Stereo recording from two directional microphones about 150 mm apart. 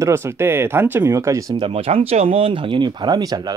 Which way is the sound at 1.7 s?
40° right (ahead or behind).